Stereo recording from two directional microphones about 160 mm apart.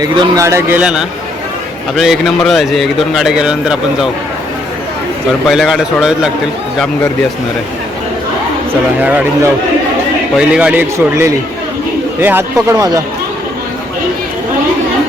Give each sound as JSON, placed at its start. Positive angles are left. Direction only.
{"t": 0.0, "sound": "speech", "side_deg": -20}
{"t": 0.8, "sound": "a man's voice", "side_deg": -5}
{"t": 5.5, "sound": "a man's voice", "side_deg": 0}
{"t": 9.0, "sound": "speech", "side_deg": -10}